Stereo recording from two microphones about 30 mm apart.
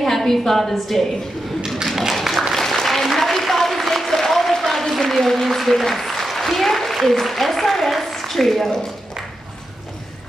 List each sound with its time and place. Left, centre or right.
0.0 s a woman's voice: centre
1.9 s a sound: centre
2.5 s applause: centre
3.2 s a sound: centre
5.1 s speech: centre
6.2 s applause: centre
7.1 s speech: centre